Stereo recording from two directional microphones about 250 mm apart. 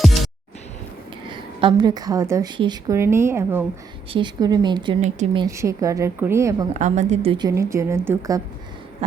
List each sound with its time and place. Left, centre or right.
0.0 s music: centre
1.3 s a woman's voice: centre
6.7 s a woman's voice: right; by 8.4 s centre